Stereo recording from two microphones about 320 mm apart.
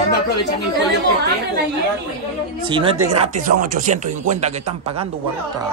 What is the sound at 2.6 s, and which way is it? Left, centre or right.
A woman's voice, centre.